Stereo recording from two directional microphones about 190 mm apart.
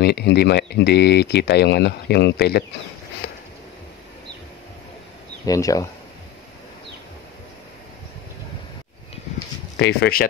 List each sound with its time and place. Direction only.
0.0 s speech: 60° left (ahead or behind)
3.2 s a sound: 55° left (ahead or behind)
5.4 s speech: 15° left (ahead or behind)
9.8 s speech: 65° left (ahead or behind)